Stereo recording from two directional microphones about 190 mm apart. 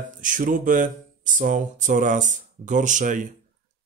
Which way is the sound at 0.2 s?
45° right (ahead or behind).